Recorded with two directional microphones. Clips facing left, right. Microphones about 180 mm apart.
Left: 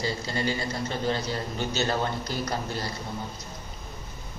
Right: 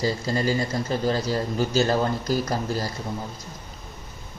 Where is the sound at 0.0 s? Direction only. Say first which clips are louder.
Right 5 dB; 35° right (ahead or behind).